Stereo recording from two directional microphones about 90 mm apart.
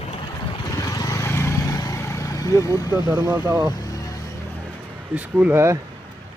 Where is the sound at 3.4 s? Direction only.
45° right (ahead or behind).